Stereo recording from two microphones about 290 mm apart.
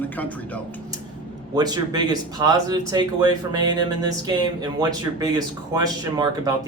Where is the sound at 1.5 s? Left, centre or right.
Centre.